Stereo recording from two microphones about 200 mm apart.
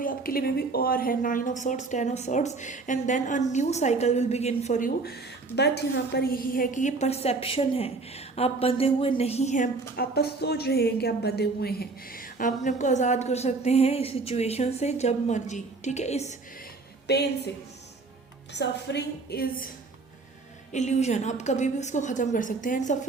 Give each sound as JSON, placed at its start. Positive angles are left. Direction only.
{"t": 0.0, "sound": "a woman's voice", "side_deg": 45}
{"t": 9.9, "sound": "a woman's voice", "side_deg": 50}
{"t": 17.1, "sound": "a woman's voice", "side_deg": 55}
{"t": 18.5, "sound": "a woman's voice", "side_deg": 60}
{"t": 20.7, "sound": "a woman's voice", "side_deg": 35}